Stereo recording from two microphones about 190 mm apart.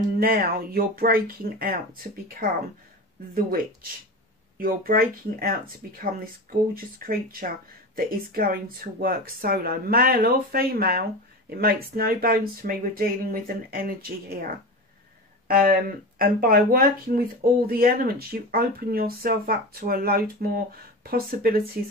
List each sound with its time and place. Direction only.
0.2 s speech: 50° right (ahead or behind)
4.6 s speech: 50° right (ahead or behind)
6.7 s speech: 50° right (ahead or behind)